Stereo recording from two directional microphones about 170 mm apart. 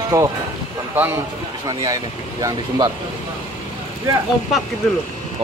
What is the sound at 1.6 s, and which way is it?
A man's voice, 20° right (ahead or behind).